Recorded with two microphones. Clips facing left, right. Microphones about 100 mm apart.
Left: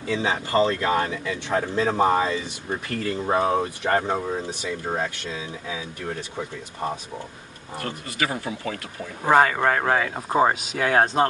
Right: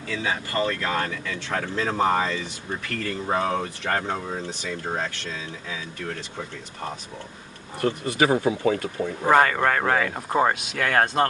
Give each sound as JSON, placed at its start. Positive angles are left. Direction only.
{"t": 0.1, "sound": "speech", "side_deg": 25}
{"t": 7.8, "sound": "speech", "side_deg": -25}
{"t": 9.2, "sound": "speech", "side_deg": 10}